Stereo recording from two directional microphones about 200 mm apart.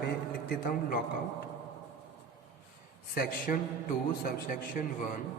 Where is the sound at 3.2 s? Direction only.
45° left (ahead or behind).